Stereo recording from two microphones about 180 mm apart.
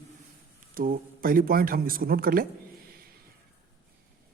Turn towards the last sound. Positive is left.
turn(degrees=-55)  # may be behind; listen again after turning